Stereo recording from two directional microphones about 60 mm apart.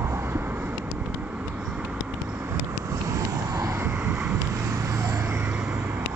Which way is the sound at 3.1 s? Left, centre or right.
Right.